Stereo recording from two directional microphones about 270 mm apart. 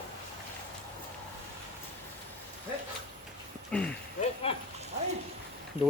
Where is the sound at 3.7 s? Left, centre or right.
Centre.